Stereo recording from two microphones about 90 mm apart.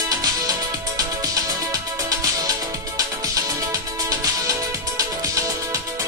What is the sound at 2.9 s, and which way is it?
Music, 40° right (ahead or behind).